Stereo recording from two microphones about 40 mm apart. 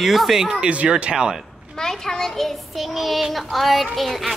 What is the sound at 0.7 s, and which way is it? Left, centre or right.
Speech, right.